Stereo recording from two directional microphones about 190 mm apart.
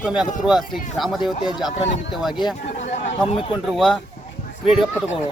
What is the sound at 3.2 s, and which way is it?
Speech, 25° left (ahead or behind).